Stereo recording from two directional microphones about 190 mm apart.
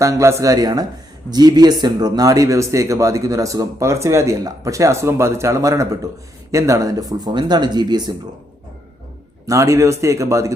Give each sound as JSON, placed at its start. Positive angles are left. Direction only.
{"t": 0.0, "sound": "speech", "side_deg": -15}
{"t": 9.5, "sound": "speech", "side_deg": -15}